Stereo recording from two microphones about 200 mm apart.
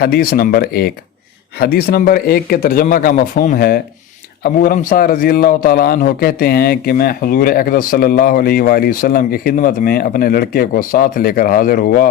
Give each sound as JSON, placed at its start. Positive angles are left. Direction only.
{"t": 0.0, "sound": "a man's voice", "side_deg": 50}